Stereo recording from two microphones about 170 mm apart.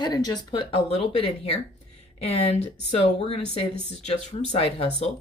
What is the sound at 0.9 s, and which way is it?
Speech, 35° left (ahead or behind).